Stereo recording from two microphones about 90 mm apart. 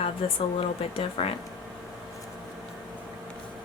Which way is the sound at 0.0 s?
90° left.